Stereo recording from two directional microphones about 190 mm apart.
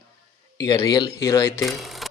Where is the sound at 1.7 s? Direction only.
Centre (ahead or behind).